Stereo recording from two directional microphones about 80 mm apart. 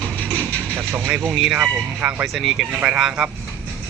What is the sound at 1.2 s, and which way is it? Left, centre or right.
Speech, centre.